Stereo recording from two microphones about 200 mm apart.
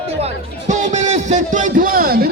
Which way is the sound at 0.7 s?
35° right (ahead or behind).